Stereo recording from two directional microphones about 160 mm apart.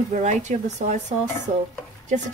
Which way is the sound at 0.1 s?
50° right (ahead or behind).